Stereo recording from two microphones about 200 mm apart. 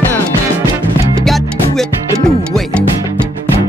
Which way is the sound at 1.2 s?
Centre (ahead or behind).